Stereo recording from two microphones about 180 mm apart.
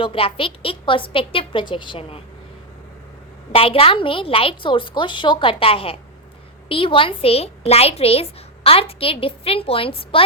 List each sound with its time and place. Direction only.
0.0 s a woman's voice: 30° left (ahead or behind)
3.5 s a woman's voice: 30° left (ahead or behind)